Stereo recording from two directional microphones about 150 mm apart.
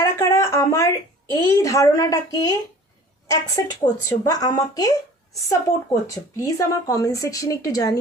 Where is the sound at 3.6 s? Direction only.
20° left (ahead or behind).